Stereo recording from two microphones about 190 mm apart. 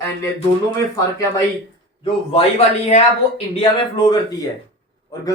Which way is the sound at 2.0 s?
30° left (ahead or behind).